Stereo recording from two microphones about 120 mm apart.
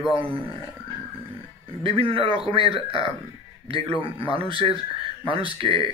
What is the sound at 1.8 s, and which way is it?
Speech, 50° right (ahead or behind).